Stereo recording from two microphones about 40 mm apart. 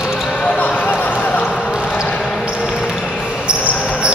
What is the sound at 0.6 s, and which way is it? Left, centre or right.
Basketball bounce, left.